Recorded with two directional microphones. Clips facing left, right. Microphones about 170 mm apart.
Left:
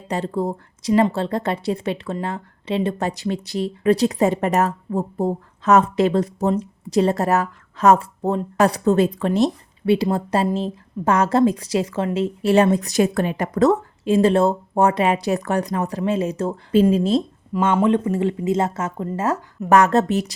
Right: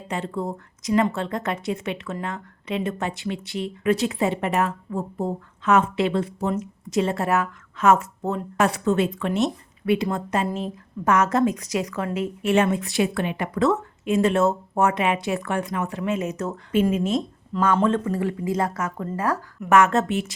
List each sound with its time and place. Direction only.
0.1 s speech: 35° left (ahead or behind)
17.7 s speech: 15° left (ahead or behind)
19.7 s speech: 35° left (ahead or behind)